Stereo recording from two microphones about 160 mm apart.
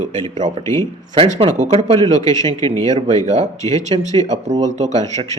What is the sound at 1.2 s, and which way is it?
Speech, 35° right (ahead or behind).